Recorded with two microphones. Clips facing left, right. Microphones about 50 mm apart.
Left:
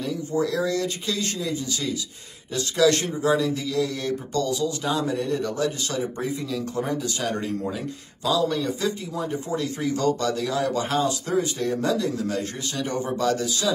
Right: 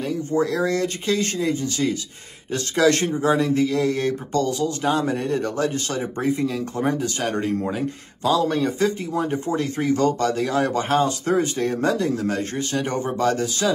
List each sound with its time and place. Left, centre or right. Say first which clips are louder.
0.0 s speech: right 3 dB; right